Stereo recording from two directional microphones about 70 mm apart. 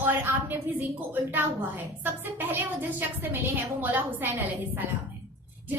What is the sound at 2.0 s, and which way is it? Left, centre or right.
A woman's voice, right.